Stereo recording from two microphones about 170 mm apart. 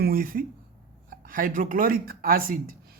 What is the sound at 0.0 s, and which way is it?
Speech, 60° right (ahead or behind).